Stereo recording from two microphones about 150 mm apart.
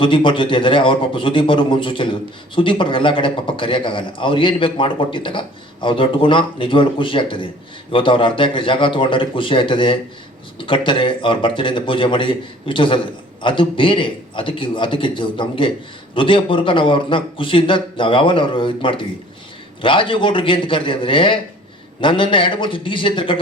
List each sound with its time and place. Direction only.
0.0 s a man's voice: 35° left (ahead or behind)